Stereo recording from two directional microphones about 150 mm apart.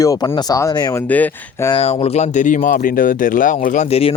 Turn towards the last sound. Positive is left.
turn(degrees=40)  # may be behind; listen again after turning